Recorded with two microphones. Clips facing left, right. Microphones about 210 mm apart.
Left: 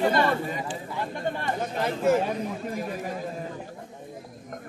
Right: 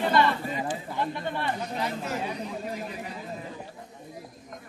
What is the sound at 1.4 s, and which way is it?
Speech, 50° left (ahead or behind).